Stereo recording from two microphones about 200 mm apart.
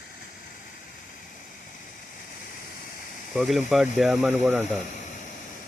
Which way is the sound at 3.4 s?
Centre (ahead or behind).